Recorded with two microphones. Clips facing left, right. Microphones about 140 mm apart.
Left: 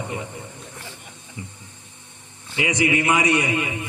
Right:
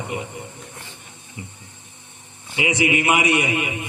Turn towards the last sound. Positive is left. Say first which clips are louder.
# even
turn(degrees=-15)  # may be behind; listen again after turning